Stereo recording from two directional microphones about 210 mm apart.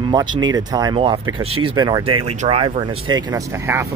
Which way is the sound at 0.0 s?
20° right (ahead or behind).